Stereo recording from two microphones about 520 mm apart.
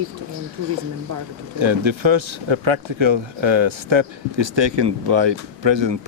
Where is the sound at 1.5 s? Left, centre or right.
Right.